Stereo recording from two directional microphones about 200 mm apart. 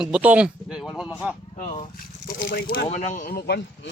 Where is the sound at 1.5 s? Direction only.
40° left (ahead or behind).